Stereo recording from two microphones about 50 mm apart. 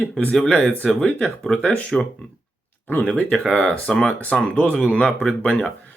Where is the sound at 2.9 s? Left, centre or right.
Left.